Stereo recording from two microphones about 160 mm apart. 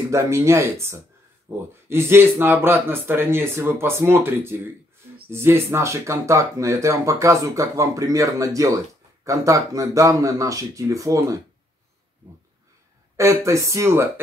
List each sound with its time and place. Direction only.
0.1 s speech: 20° right (ahead or behind)
13.1 s speech: 20° right (ahead or behind)